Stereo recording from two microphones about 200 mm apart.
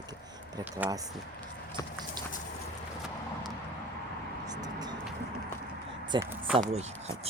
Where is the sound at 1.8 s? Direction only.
20° left (ahead or behind).